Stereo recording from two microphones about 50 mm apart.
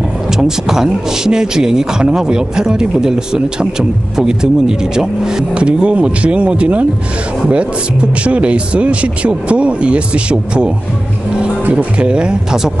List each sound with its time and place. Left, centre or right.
0.4 s speech: centre
11.7 s speech: centre